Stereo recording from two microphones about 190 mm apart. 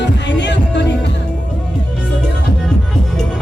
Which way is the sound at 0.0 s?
65° left (ahead or behind).